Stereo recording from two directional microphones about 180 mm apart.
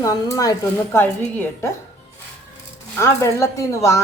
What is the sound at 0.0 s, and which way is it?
A man's voice, 20° left (ahead or behind).